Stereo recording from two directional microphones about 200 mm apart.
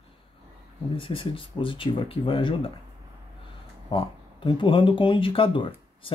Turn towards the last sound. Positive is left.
turn(degrees=25)  # may be behind; listen again after turning